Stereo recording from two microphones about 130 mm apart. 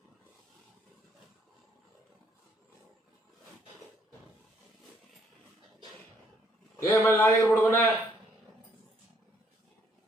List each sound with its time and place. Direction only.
6.7 s a man's voice: 15° left (ahead or behind)